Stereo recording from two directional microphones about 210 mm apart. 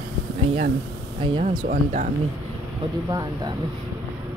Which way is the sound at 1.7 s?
35° right (ahead or behind).